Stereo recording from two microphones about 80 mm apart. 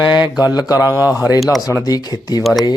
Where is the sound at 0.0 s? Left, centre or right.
Left.